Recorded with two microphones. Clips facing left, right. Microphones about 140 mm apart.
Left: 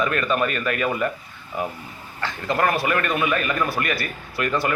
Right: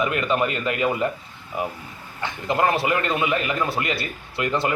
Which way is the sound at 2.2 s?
20° right (ahead or behind).